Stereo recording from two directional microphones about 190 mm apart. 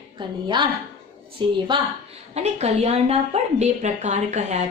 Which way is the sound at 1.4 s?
25° right (ahead or behind).